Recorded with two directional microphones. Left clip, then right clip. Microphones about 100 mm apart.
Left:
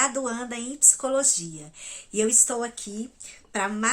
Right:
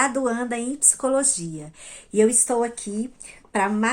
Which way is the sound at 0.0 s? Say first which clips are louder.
Right 4 dB; 20° left (ahead or behind).